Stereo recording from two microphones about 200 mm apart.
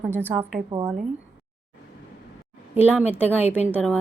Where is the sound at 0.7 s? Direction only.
20° right (ahead or behind).